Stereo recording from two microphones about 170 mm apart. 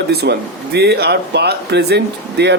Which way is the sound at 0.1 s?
75° right (ahead or behind).